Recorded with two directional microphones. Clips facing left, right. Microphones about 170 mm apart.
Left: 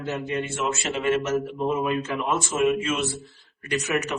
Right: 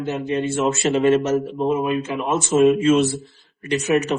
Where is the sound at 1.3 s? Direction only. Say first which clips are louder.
Right 4 dB; 20° right (ahead or behind).